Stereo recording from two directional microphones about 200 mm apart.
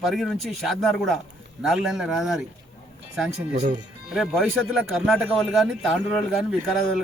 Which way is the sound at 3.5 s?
30° right (ahead or behind).